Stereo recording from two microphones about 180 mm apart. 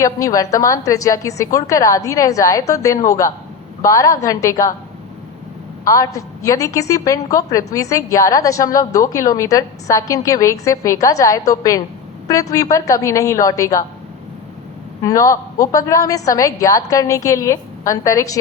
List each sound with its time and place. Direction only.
0.0 s a woman's voice: 20° left (ahead or behind)
5.8 s a woman's voice: 20° left (ahead or behind)
15.0 s a woman's voice: 20° left (ahead or behind)